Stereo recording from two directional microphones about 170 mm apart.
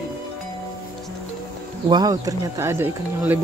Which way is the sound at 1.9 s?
20° right (ahead or behind).